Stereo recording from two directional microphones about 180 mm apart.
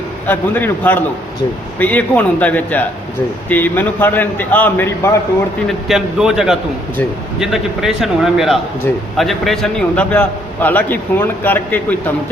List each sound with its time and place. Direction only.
0.3 s a man's voice: 10° left (ahead or behind)
5.6 s a man's voice: 5° right (ahead or behind)